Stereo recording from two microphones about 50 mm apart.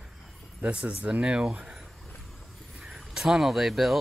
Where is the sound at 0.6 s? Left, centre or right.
Right.